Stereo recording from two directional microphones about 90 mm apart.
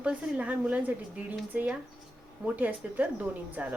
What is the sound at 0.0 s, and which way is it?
A woman's voice, 15° right (ahead or behind).